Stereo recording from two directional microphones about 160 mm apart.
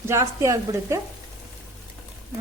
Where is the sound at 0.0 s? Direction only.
15° right (ahead or behind).